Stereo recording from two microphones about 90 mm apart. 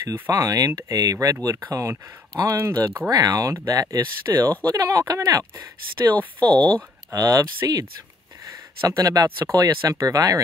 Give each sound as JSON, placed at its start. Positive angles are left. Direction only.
{"t": 0.1, "sound": "speech", "side_deg": -30}
{"t": 0.6, "sound": "speech", "side_deg": -40}
{"t": 3.1, "sound": "speech", "side_deg": -40}
{"t": 6.1, "sound": "speech", "side_deg": 15}
{"t": 7.1, "sound": "speech", "side_deg": -40}